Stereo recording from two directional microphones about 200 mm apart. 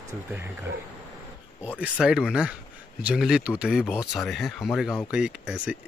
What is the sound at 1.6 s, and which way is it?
Speech, 5° right (ahead or behind).